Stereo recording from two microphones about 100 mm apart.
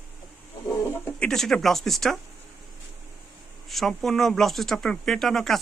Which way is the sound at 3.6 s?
Centre (ahead or behind).